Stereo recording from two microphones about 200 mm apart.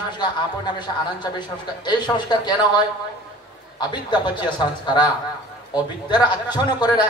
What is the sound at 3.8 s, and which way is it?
A man's voice, 20° left (ahead or behind).